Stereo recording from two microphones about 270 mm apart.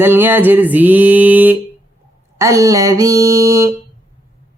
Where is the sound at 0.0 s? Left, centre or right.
Centre.